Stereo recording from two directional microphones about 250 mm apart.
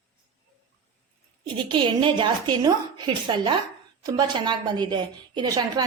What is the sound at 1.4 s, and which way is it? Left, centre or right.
A woman's voice, centre.